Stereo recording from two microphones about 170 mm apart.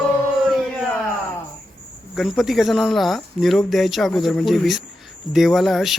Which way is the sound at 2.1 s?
Centre (ahead or behind).